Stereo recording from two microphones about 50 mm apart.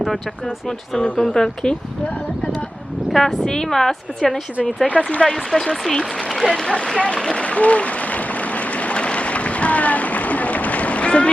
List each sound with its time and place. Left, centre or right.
0.9 s speech: left
1.2 s a woman's voice: centre
3.1 s a woman's voice: centre
5.1 s speech: centre
5.5 s a woman's voice: centre
7.3 s a sound: left